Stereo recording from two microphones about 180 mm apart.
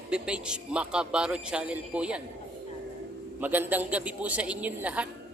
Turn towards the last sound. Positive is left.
turn(degrees=-10)  # may be behind; listen again after turning